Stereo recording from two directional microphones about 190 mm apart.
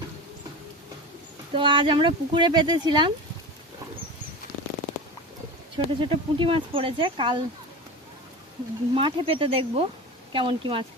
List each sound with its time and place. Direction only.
1.5 s speech: 25° right (ahead or behind)
5.7 s speech: 25° right (ahead or behind)
9.0 s speech: 30° right (ahead or behind)